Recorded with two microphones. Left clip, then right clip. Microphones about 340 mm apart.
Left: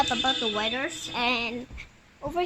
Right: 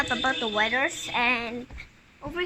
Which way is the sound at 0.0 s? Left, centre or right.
Centre.